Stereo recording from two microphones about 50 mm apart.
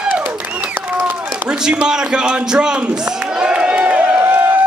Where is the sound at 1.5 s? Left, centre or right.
Centre.